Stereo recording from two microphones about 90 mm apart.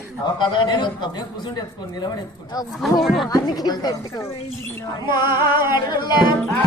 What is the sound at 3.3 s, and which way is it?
Speech, 50° left (ahead or behind).